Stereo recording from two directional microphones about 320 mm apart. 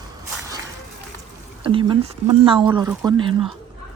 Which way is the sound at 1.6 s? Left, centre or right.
Centre.